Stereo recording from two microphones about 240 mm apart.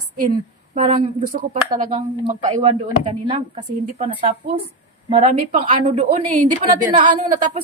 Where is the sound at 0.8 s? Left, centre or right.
Right.